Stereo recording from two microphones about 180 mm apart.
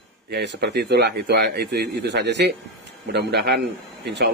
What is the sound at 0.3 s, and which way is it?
Speech, 65° right (ahead or behind).